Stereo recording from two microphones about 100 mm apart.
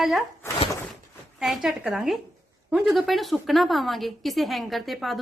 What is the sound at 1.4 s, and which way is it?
A woman's voice, 5° right (ahead or behind).